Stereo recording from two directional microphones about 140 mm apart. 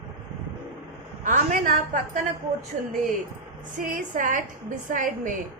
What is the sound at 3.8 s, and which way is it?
A woman's voice, 75° right (ahead or behind).